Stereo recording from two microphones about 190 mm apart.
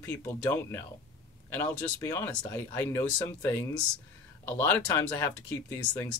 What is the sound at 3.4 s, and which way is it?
Speech, 20° left (ahead or behind).